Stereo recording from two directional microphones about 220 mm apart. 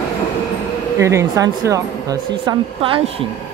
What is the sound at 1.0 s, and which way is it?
Speech, 15° right (ahead or behind).